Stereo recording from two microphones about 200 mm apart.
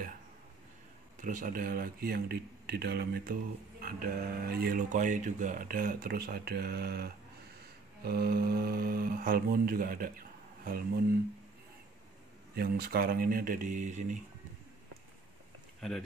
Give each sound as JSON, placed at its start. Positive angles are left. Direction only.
{"t": 1.2, "sound": "speech", "side_deg": -40}
{"t": 12.5, "sound": "speech", "side_deg": -50}